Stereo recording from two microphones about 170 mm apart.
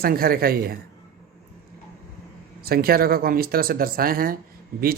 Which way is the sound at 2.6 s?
65° right (ahead or behind).